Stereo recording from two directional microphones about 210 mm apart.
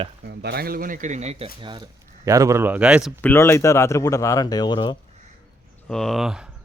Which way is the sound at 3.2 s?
10° left (ahead or behind).